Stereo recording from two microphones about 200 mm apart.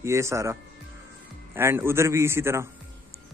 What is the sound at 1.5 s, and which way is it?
Speech, 10° right (ahead or behind).